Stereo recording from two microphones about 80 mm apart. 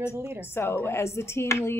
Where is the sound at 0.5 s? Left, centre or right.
Left.